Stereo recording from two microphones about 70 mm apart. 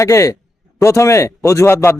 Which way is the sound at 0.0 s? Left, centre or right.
Left.